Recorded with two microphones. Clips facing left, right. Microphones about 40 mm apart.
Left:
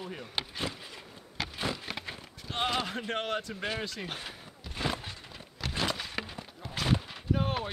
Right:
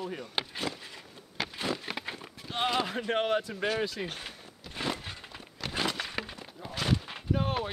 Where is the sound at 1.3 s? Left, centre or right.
Centre.